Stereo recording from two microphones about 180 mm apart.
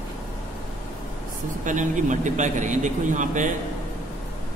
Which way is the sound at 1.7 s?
45° right (ahead or behind).